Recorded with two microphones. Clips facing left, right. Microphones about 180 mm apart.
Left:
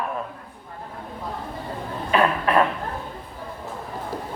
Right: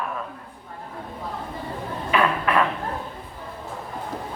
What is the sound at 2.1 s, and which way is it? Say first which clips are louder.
Cough: left 2 dB; 35° left (ahead or behind).